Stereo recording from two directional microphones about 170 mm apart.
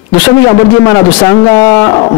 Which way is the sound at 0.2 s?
20° left (ahead or behind).